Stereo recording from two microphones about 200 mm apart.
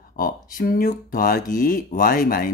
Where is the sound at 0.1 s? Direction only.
45° left (ahead or behind).